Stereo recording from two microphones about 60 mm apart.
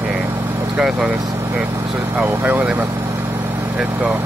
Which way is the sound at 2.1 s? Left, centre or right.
Right.